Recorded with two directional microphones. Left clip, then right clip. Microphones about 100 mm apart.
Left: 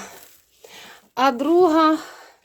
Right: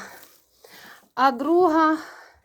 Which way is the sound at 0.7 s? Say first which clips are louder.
Left 2 dB; 40° left (ahead or behind).